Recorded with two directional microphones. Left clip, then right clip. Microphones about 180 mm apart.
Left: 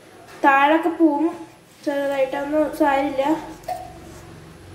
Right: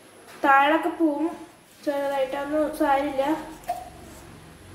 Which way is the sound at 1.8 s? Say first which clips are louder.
Left 4 dB; 5° left (ahead or behind).